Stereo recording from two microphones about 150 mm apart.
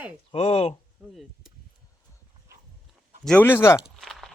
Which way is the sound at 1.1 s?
Centre (ahead or behind).